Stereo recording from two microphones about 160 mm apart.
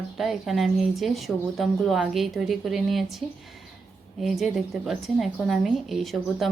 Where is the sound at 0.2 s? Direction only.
Centre (ahead or behind).